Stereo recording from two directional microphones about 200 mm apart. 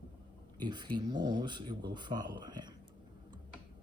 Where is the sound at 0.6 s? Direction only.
20° right (ahead or behind).